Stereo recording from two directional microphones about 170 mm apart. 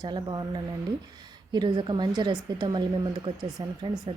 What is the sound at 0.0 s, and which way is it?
A woman's voice, 25° right (ahead or behind).